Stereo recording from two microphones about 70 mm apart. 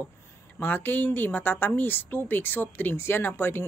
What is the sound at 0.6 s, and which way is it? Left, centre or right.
Speech, left.